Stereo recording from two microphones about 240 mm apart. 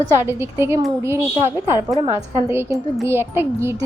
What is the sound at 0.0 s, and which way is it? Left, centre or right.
A woman's voice, centre.